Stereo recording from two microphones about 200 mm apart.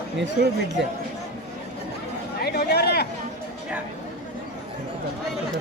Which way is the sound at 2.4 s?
50° left (ahead or behind).